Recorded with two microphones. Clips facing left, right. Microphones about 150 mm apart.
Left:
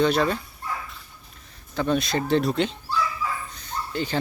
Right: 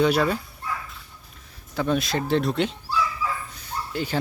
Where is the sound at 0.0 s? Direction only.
5° right (ahead or behind).